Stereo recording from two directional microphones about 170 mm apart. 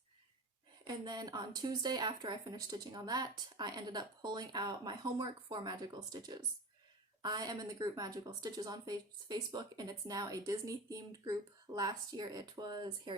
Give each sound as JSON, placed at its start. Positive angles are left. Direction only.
{"t": 0.9, "sound": "a woman's voice", "side_deg": -25}